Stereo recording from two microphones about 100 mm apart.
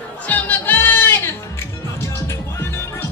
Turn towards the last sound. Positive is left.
turn(degrees=25)  # may be behind; listen again after turning